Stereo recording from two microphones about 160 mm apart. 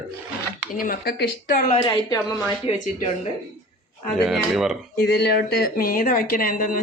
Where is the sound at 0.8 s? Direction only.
70° left (ahead or behind).